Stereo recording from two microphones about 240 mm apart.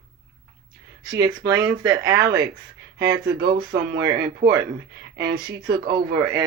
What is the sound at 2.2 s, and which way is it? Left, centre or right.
Speech, right.